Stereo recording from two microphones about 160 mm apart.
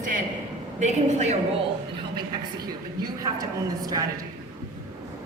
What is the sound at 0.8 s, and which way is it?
Speech, 45° right (ahead or behind).